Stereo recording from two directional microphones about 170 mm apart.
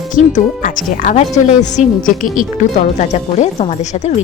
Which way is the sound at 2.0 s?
50° left (ahead or behind).